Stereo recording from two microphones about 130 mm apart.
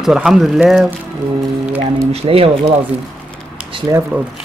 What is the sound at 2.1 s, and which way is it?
Speech, 50° right (ahead or behind).